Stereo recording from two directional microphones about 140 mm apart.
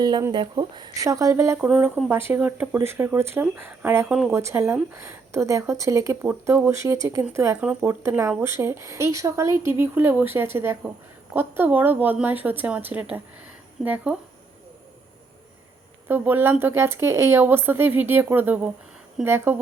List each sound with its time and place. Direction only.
0.0 s a woman's voice: 30° right (ahead or behind)
1.6 s speech: 5° right (ahead or behind)
2.0 s a woman's voice: 15° right (ahead or behind)
16.0 s speech: 15° right (ahead or behind)